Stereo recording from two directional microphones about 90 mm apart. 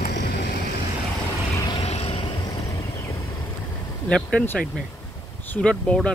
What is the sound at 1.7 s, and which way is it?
Vehicle, 90° left.